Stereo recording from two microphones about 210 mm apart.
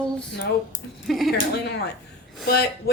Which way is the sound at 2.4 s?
50° left (ahead or behind).